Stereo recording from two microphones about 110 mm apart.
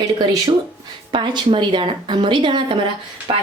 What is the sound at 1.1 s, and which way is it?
A woman's voice, 50° right (ahead or behind).